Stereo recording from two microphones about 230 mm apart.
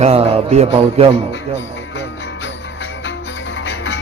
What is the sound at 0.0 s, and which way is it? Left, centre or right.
A man's voice, right.